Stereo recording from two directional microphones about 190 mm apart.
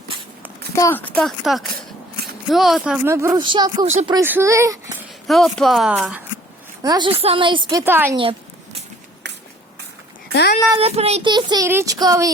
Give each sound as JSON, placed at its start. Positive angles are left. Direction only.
{"t": 0.8, "sound": "speech", "side_deg": 10}
{"t": 4.2, "sound": "speech", "side_deg": -10}
{"t": 5.3, "sound": "speech", "side_deg": 0}
{"t": 6.8, "sound": "speech", "side_deg": -25}
{"t": 8.2, "sound": "a sound", "side_deg": -30}
{"t": 9.2, "sound": "shuffle", "side_deg": -65}
{"t": 10.7, "sound": "speech", "side_deg": -30}